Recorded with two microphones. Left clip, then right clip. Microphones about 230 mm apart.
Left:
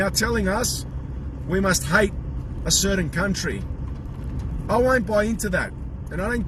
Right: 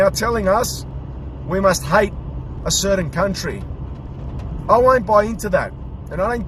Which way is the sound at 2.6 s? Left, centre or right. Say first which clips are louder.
Right 4 dB; centre.